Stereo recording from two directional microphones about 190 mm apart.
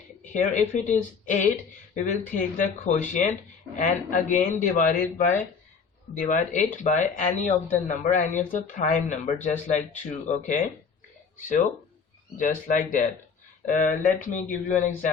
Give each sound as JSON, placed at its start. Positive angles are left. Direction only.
{"t": 0.3, "sound": "speech", "side_deg": 40}
{"t": 12.4, "sound": "speech", "side_deg": 45}